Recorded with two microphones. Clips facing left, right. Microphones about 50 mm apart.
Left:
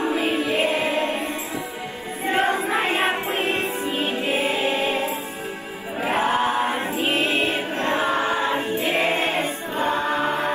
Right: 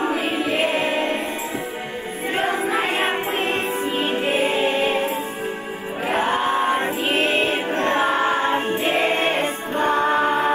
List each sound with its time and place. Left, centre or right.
0.4 s music: right
3.1 s music: right
6.1 s chant: right
6.4 s music: centre
7.1 s music: right